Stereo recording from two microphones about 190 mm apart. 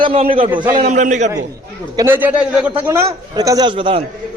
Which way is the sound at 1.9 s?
10° right (ahead or behind).